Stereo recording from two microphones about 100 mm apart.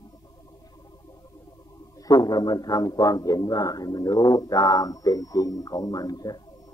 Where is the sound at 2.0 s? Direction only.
40° left (ahead or behind).